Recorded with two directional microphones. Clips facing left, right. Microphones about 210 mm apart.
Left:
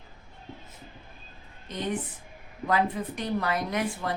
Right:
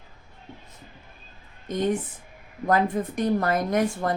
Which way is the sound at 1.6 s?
45° right (ahead or behind).